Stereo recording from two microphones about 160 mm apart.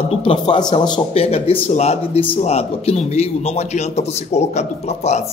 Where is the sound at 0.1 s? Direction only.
35° left (ahead or behind).